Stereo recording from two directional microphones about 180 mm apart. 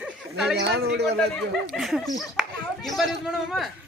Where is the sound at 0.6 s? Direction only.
65° right (ahead or behind).